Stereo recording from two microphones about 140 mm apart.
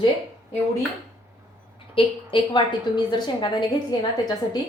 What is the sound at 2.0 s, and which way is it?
Speech, 40° left (ahead or behind).